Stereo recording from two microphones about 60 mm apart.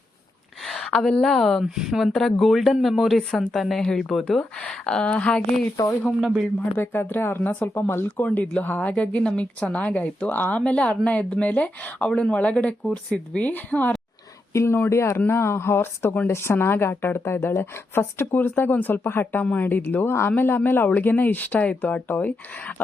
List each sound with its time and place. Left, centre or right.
0.9 s speech: centre
1.6 s speech: centre; by 5.4 s left
6.1 s speech: centre
6.7 s a woman's voice: left
8.2 s a woman's voice: left
10.6 s a woman's voice: centre
14.5 s a woman's voice: left